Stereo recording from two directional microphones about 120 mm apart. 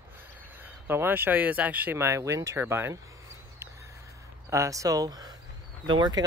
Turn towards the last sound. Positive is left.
turn(degrees=-35)  # may be behind; listen again after turning